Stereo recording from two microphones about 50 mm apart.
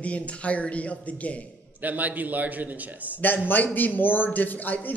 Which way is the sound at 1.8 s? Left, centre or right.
Right.